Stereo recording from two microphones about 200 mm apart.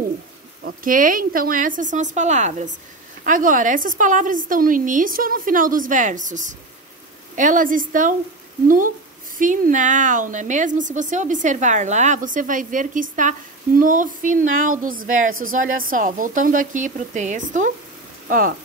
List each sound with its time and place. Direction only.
0.7 s a woman's voice: 45° right (ahead or behind)
9.4 s a woman's voice: 40° right (ahead or behind)